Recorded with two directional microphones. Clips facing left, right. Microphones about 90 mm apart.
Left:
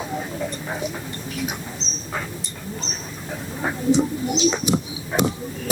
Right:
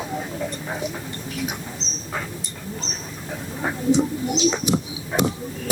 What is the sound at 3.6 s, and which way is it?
Speech, 30° left (ahead or behind).